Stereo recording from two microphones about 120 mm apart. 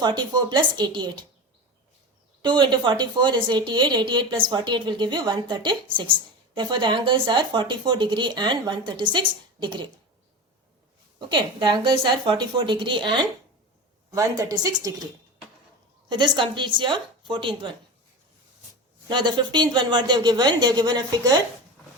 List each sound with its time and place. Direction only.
0.0 s a woman's voice: 35° right (ahead or behind)
2.4 s a woman's voice: 40° right (ahead or behind)
11.3 s a woman's voice: 40° right (ahead or behind)
14.1 s a woman's voice: 30° right (ahead or behind)
16.0 s a woman's voice: 40° right (ahead or behind)
19.0 s a woman's voice: 40° right (ahead or behind)